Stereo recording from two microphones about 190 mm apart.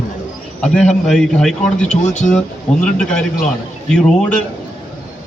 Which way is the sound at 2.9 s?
5° left (ahead or behind).